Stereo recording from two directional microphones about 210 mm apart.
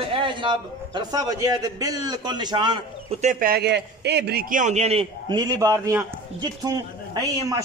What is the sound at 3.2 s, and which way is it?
A man's voice, 40° right (ahead or behind).